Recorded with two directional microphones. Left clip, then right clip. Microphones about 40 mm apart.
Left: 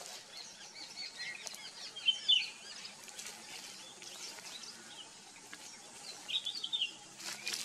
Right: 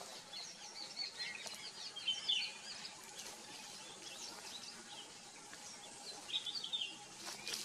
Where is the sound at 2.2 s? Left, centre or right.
Left.